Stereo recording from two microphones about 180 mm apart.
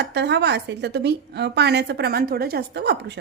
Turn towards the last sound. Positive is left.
turn(degrees=-70)  # may be behind; listen again after turning